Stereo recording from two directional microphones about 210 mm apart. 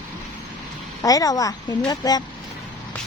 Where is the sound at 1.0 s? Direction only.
15° left (ahead or behind).